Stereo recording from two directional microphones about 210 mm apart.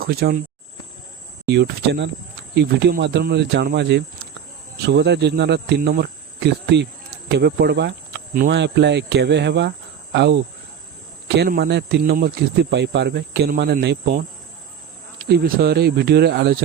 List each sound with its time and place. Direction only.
0.0 s speech: 45° right (ahead or behind)
1.5 s speech: 50° right (ahead or behind)
2.6 s cricket: 55° right (ahead or behind)
4.8 s speech: 55° right (ahead or behind)
8.5 s cricket: 55° right (ahead or behind)
11.3 s speech: 50° right (ahead or behind)
15.3 s speech: 50° right (ahead or behind)